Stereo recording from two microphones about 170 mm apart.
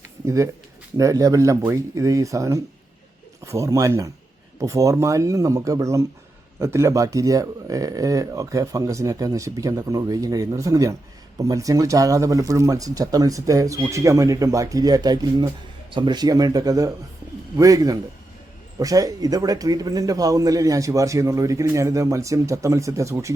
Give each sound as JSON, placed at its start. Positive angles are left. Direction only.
{"t": 0.3, "sound": "speech", "side_deg": -20}